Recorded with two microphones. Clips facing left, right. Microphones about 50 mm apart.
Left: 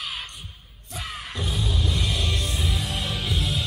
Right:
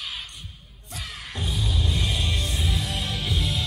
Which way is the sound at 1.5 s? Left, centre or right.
Centre.